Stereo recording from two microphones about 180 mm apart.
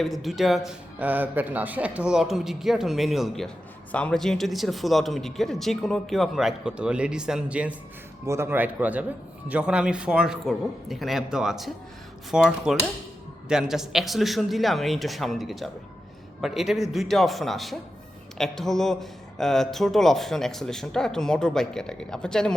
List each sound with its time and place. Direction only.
0.0 s speech: centre (ahead or behind)